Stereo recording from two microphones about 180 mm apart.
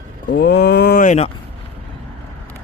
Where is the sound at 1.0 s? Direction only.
40° left (ahead or behind).